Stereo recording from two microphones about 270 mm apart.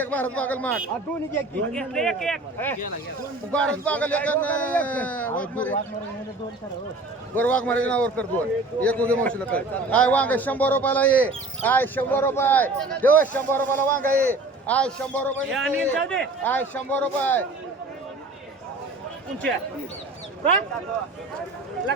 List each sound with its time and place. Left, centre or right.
0.0 s a man's voice: centre
7.3 s a man's voice: centre